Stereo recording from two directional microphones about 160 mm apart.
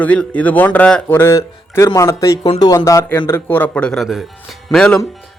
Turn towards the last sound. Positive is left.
turn(degrees=5)  # may be behind; listen again after turning